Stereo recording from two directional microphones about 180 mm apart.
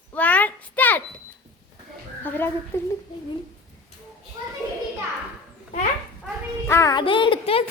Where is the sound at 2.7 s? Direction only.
15° left (ahead or behind).